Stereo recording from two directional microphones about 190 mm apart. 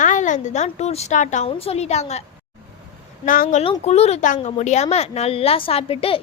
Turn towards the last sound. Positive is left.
turn(degrees=30)  # may be behind; listen again after turning